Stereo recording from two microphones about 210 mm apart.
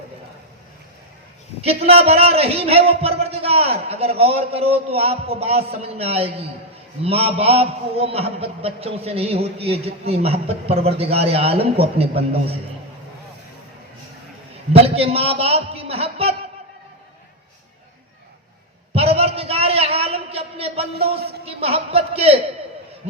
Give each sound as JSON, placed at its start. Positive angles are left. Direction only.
{"t": 1.6, "sound": "a man's voice", "side_deg": -30}
{"t": 14.7, "sound": "a man's voice", "side_deg": -30}
{"t": 18.9, "sound": "a sound", "side_deg": -30}